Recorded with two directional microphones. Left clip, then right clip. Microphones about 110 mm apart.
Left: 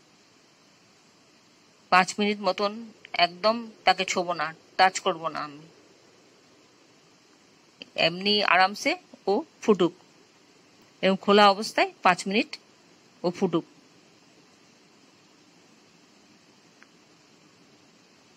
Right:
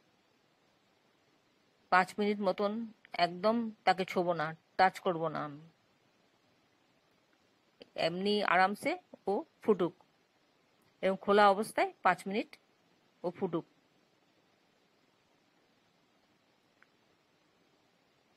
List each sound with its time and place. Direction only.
1.9 s speech: 40° right (ahead or behind)
7.8 s a sound: 40° right (ahead or behind)
8.1 s speech: 40° right (ahead or behind)
11.0 s speech: 35° right (ahead or behind)